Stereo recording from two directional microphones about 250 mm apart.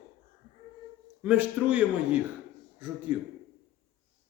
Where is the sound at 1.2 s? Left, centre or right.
Centre.